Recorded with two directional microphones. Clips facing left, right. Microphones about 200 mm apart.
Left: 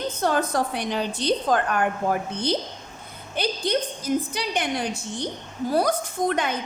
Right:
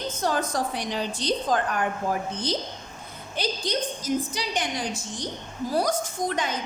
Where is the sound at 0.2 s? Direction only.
60° left (ahead or behind).